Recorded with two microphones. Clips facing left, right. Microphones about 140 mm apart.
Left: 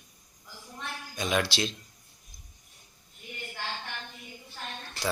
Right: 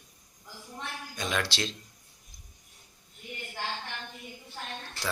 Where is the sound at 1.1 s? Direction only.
10° left (ahead or behind).